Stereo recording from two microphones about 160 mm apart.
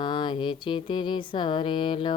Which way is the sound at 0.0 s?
30° left (ahead or behind).